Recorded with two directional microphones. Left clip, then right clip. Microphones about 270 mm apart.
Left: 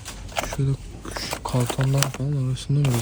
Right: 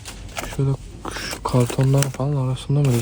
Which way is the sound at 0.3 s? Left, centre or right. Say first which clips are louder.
Even; centre.